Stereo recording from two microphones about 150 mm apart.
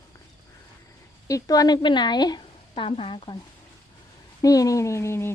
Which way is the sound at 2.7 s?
40° left (ahead or behind).